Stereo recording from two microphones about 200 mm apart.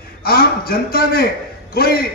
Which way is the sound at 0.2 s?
50° left (ahead or behind).